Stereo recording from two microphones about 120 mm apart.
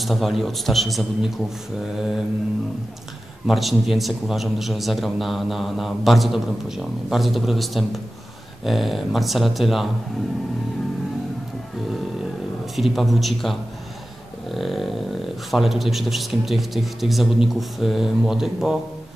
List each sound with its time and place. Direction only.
0.0 s a man's voice: centre (ahead or behind)
3.4 s a man's voice: centre (ahead or behind)
12.7 s a man's voice: centre (ahead or behind)